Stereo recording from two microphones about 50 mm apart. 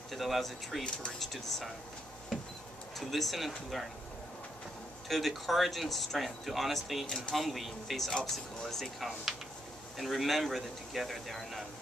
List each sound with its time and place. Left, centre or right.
0.1 s speech: centre
3.0 s speech: centre
5.0 s speech: centre
7.1 s speech: centre
7.3 s speech: centre
9.9 s speech: centre